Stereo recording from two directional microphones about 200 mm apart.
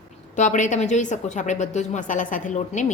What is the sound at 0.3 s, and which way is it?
Speech, 40° left (ahead or behind).